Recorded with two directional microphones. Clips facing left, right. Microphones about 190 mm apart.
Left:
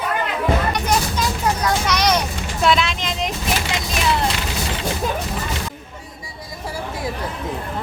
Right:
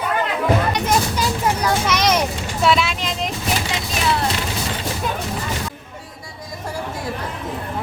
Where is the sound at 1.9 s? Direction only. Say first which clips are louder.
Even; 25° right (ahead or behind).